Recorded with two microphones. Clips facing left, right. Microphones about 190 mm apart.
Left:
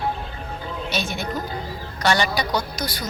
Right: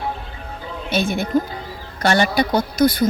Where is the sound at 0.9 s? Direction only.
55° right (ahead or behind).